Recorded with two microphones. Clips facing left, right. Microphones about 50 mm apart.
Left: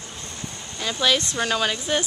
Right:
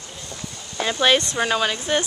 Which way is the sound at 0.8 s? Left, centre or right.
Right.